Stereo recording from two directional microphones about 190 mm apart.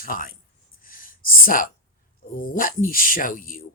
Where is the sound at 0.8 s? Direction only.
45° left (ahead or behind).